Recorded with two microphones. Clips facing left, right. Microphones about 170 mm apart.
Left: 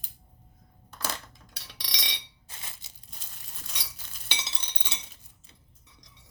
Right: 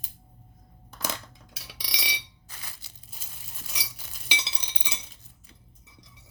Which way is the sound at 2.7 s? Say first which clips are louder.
Right 1 dB; 20° left (ahead or behind).